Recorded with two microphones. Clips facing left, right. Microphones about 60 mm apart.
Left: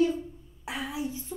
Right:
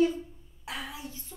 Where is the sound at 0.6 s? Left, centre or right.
Centre.